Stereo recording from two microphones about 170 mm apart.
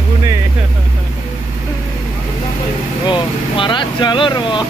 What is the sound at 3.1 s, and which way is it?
Speech, 30° left (ahead or behind).